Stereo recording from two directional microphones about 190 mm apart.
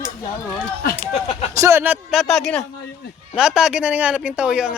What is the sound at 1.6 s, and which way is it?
Speech, 10° right (ahead or behind).